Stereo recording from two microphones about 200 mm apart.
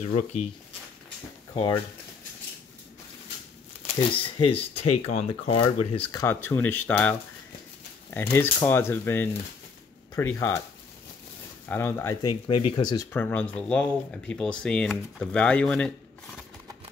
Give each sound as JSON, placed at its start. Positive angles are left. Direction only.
{"t": 0.0, "sound": "speech", "side_deg": 35}
{"t": 1.5, "sound": "speech", "side_deg": 25}
{"t": 3.8, "sound": "speech", "side_deg": 25}
{"t": 6.5, "sound": "speech", "side_deg": 10}
{"t": 11.7, "sound": "speech", "side_deg": 10}
{"t": 13.1, "sound": "speech", "side_deg": 10}